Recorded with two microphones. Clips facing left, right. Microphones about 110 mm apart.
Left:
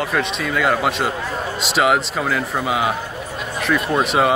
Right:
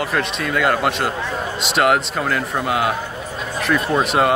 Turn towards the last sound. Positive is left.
turn(degrees=0)  # may be behind; listen again after turning